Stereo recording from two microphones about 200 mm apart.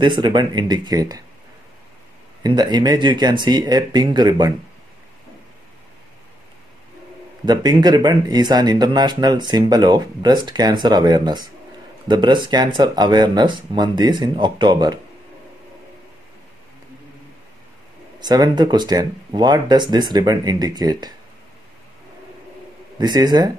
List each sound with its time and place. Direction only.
0.0 s speech: 20° right (ahead or behind)
2.4 s speech: 20° right (ahead or behind)
7.4 s speech: 20° right (ahead or behind)
18.2 s speech: 20° right (ahead or behind)
22.9 s speech: 20° right (ahead or behind)